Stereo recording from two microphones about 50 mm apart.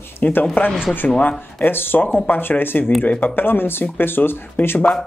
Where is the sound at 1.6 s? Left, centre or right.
Left.